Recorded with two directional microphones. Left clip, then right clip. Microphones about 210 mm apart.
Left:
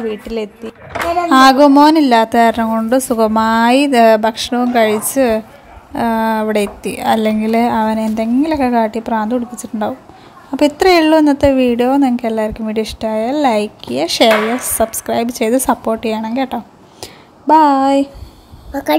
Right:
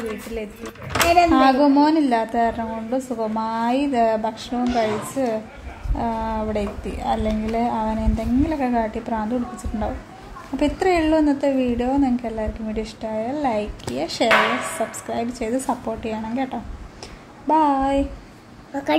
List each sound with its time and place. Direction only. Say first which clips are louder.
1.3 s a woman's voice: left 8 dB; 35° left (ahead or behind)
10.5 s a woman's voice: left 9 dB; 35° left (ahead or behind)